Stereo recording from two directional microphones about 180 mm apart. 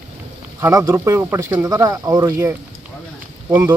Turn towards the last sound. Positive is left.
turn(degrees=-10)  # may be behind; listen again after turning